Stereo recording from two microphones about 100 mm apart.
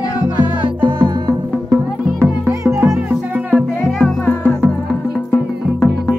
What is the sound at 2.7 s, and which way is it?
Music, 25° right (ahead or behind).